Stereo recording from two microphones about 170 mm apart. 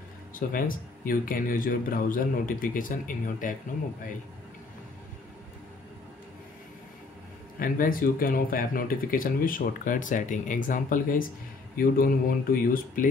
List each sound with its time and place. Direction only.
0.3 s speech: 55° left (ahead or behind)
7.5 s speech: 55° left (ahead or behind)